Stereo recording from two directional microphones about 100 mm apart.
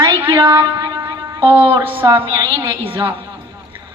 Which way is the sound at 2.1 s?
35° right (ahead or behind).